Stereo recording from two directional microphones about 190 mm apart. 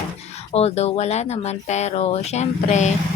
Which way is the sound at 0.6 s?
35° left (ahead or behind).